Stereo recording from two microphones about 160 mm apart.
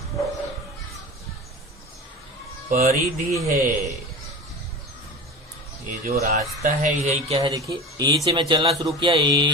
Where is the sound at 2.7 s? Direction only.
65° right (ahead or behind).